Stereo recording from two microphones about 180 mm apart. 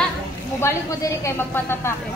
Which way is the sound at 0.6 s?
15° left (ahead or behind).